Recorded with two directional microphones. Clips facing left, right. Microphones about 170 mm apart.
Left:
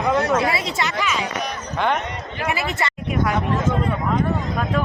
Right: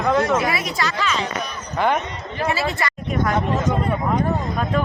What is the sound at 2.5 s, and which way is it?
Speech, 20° left (ahead or behind).